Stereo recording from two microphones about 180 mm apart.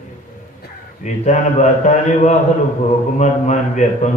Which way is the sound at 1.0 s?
40° left (ahead or behind).